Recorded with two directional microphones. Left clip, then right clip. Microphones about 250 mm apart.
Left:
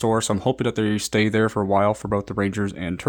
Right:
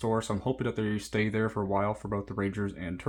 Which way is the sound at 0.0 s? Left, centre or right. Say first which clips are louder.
Left 9 dB; left.